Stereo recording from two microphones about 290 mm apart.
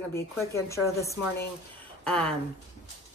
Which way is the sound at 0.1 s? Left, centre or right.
Centre.